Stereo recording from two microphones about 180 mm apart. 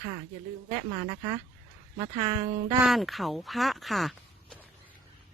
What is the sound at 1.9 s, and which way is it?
Speech, 25° right (ahead or behind).